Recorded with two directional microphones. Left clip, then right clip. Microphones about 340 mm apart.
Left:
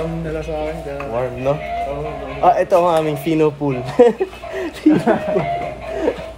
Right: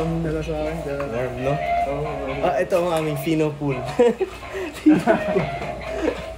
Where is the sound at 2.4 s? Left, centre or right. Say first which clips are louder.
Left 8 dB; centre.